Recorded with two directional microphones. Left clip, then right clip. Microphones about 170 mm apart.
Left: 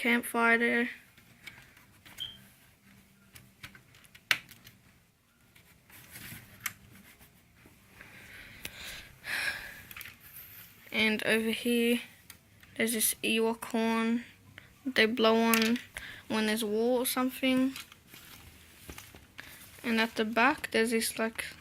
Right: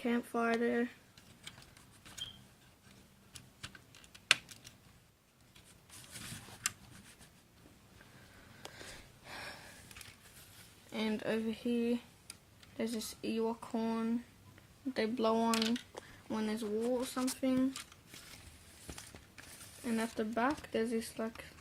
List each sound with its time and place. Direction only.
0.0 s speech: 15° left (ahead or behind)
8.6 s gasp: 10° left (ahead or behind)
9.2 s gasp: 5° right (ahead or behind)
10.9 s speech: centre (ahead or behind); by 17.7 s 20° left (ahead or behind)
19.8 s speech: 15° left (ahead or behind)